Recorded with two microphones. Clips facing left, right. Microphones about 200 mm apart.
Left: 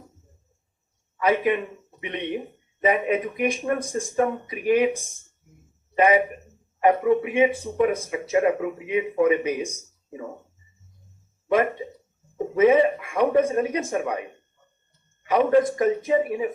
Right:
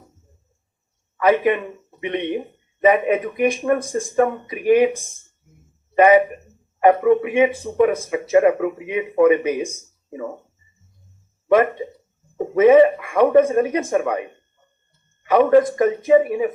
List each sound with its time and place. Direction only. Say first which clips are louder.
1.1 s a man's voice: right 5 dB; 60° right (ahead or behind)
6.0 s speech: right 6 dB; 55° right (ahead or behind)
12.5 s speech: right 6 dB; 60° right (ahead or behind)
15.3 s speech: right 5 dB; 60° right (ahead or behind)